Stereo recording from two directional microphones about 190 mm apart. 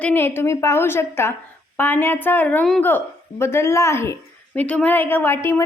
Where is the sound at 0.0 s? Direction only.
10° left (ahead or behind).